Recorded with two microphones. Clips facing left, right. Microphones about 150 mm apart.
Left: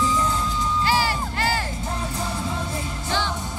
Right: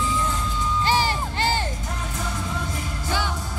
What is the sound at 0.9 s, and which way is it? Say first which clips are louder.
Music: even; 25° right (ahead or behind).